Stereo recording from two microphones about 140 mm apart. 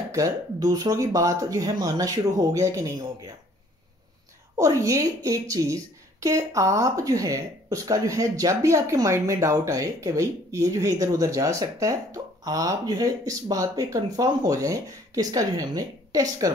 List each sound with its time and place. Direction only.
0.1 s a woman's voice: 25° right (ahead or behind)
4.6 s a woman's voice: 25° right (ahead or behind)